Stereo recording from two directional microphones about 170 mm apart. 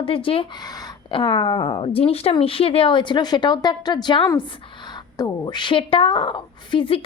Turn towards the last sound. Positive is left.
turn(degrees=30)  # may be behind; listen again after turning